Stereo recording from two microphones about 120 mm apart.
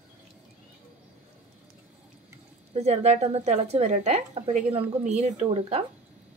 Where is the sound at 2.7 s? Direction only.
65° right (ahead or behind).